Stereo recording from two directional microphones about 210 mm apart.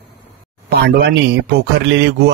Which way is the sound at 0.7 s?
50° right (ahead or behind).